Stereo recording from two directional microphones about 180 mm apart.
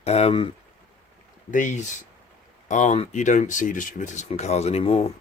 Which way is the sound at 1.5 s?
45° left (ahead or behind).